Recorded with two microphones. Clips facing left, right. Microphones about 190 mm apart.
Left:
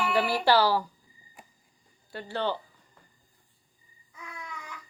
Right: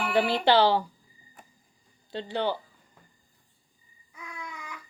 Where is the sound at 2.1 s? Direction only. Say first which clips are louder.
Right 2 dB; 20° right (ahead or behind).